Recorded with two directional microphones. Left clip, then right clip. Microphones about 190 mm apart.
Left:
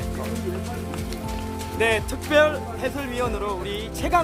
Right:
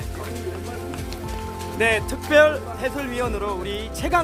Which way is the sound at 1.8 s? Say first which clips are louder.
Right 1 dB; 15° right (ahead or behind).